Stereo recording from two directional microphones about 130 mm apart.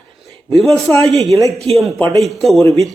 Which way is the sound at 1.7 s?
50° right (ahead or behind).